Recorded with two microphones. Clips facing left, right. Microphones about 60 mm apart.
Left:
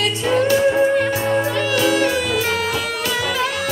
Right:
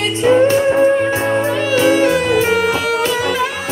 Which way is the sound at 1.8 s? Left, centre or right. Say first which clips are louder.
Right 6 dB; right.